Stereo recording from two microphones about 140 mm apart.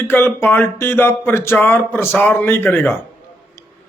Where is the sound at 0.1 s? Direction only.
15° left (ahead or behind).